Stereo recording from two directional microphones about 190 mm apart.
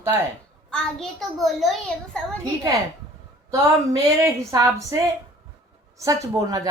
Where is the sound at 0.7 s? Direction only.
5° left (ahead or behind).